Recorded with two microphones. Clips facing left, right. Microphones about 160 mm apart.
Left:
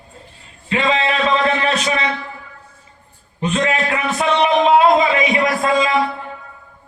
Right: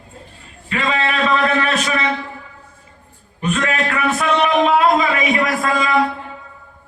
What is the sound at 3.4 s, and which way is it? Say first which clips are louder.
A man's voice: left 1 dB; 30° left (ahead or behind).